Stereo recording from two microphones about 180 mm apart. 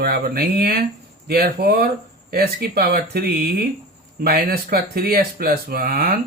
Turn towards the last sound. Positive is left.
turn(degrees=-55)  # may be behind; listen again after turning